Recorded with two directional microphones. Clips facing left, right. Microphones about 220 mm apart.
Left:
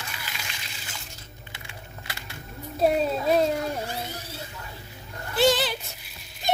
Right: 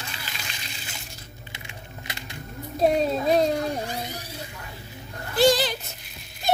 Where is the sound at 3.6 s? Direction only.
15° right (ahead or behind).